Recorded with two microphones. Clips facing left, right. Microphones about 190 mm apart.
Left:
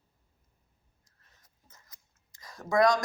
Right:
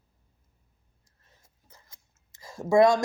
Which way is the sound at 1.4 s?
30° right (ahead or behind).